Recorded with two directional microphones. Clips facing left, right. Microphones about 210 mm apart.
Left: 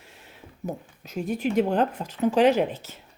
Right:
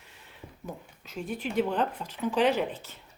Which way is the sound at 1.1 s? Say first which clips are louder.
Left 6 dB; 40° left (ahead or behind).